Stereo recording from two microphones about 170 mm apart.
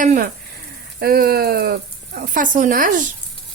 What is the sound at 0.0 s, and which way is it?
Speech, 50° right (ahead or behind).